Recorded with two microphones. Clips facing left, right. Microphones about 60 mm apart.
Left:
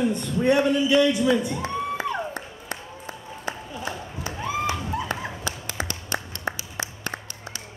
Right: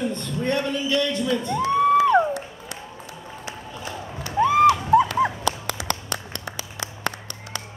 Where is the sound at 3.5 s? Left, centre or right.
Left.